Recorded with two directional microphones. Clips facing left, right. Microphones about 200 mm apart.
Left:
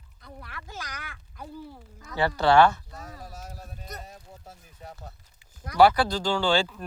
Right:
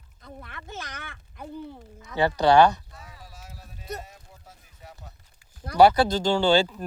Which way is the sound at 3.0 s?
45° left (ahead or behind).